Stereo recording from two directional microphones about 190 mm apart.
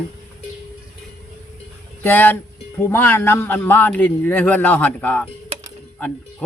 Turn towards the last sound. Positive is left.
turn(degrees=10)  # may be behind; listen again after turning